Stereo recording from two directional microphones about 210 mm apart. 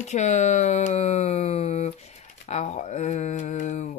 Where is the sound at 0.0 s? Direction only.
35° left (ahead or behind).